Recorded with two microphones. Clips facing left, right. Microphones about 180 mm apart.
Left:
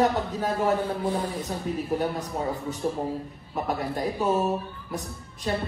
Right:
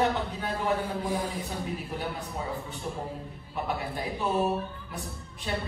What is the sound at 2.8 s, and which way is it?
Speech, 40° left (ahead or behind).